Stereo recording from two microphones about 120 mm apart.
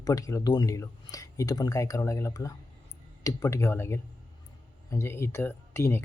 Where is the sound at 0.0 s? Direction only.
30° left (ahead or behind).